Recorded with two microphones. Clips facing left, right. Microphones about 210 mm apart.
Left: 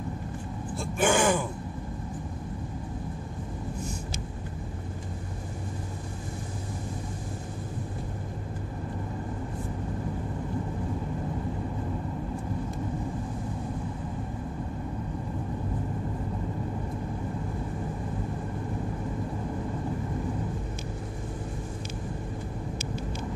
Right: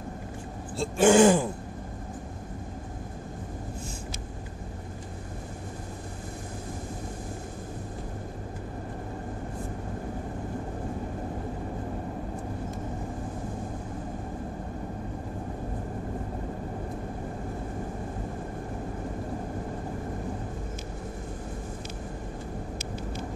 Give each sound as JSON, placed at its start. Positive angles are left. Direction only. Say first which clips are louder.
{"t": 0.7, "sound": "throat clearing", "louder": "right 6 dB", "side_deg": -30}